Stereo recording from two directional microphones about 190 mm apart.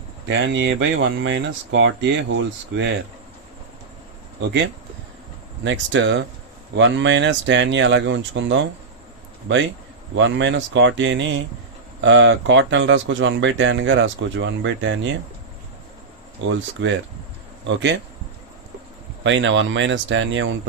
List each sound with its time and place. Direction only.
0.3 s speech: 70° right (ahead or behind)
5.6 s speech: 75° right (ahead or behind)
10.2 s speech: 75° right (ahead or behind)
16.5 s speech: 80° right
19.2 s speech: 75° right (ahead or behind)